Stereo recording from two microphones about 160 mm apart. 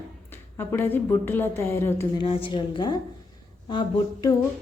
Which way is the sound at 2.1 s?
35° left (ahead or behind).